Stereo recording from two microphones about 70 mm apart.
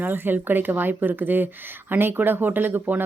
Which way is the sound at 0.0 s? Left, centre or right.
Right.